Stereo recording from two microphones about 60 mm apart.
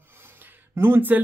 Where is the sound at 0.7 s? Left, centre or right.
Right.